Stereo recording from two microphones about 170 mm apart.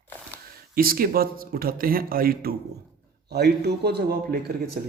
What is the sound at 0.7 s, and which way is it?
Speech, 60° right (ahead or behind).